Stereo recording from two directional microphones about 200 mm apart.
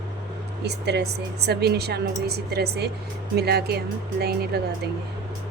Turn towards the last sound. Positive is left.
turn(degrees=-55)  # may be behind; listen again after turning